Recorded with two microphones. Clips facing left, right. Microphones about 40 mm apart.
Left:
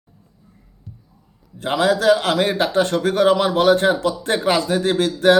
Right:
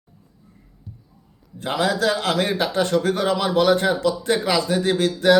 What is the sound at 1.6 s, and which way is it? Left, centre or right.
A man's voice, left.